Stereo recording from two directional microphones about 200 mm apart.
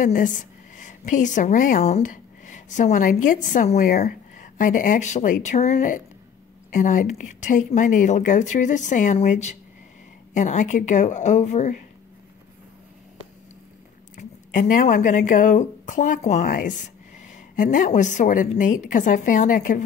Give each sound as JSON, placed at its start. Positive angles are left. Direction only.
{"t": 0.0, "sound": "a woman's voice", "side_deg": 40}
{"t": 14.1, "sound": "speech", "side_deg": 40}